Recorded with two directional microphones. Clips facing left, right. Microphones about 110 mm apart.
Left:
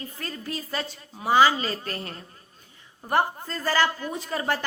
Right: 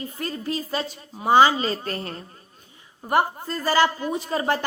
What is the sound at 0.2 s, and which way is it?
A man's voice, 20° right (ahead or behind).